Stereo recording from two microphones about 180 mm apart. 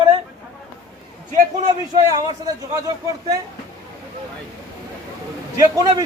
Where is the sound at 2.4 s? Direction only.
20° right (ahead or behind).